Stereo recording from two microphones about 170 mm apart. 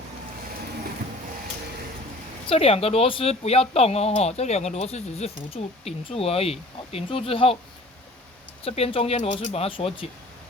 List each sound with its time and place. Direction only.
2.5 s speech: 35° left (ahead or behind)
8.6 s speech: 35° left (ahead or behind)